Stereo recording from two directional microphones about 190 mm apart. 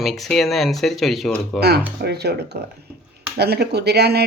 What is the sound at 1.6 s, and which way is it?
Speech, 60° right (ahead or behind).